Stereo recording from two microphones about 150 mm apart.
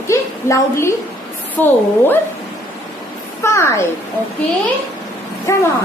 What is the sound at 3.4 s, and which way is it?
Speech, 20° left (ahead or behind).